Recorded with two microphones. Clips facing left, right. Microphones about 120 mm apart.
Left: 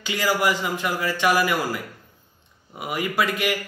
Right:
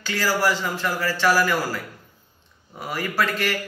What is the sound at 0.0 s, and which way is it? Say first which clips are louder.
A man's voice: even; 15° left (ahead or behind).